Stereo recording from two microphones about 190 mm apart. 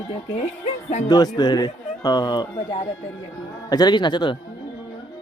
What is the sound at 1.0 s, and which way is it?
Speech, 20° left (ahead or behind).